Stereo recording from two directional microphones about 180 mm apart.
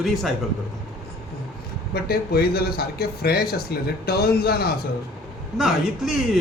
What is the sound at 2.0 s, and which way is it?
A man's voice, 60° left (ahead or behind).